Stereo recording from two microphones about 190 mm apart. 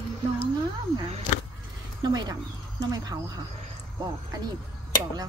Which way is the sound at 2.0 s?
20° right (ahead or behind).